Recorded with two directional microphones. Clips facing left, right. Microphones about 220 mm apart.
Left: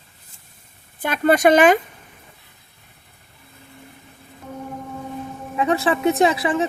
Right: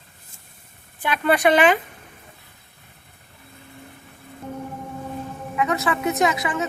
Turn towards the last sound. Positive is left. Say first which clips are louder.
# left 4 dB
turn(degrees=30)  # may be behind; listen again after turning